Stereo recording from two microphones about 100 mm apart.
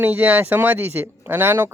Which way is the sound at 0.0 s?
15° right (ahead or behind).